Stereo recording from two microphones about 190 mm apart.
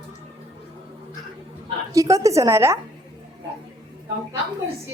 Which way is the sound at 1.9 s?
15° right (ahead or behind).